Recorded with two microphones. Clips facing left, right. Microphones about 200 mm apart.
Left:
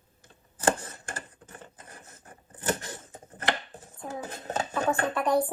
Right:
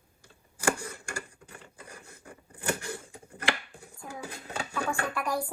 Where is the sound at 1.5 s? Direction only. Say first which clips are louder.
Even; 35° left (ahead or behind).